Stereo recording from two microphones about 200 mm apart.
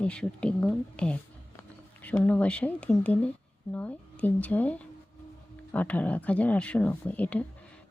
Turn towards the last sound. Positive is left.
turn(degrees=5)  # may be behind; listen again after turning